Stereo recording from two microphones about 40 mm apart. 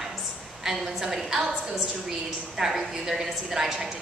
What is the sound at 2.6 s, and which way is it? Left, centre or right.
A woman's voice, centre.